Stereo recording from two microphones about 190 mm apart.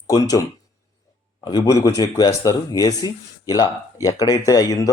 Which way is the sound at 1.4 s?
20° left (ahead or behind).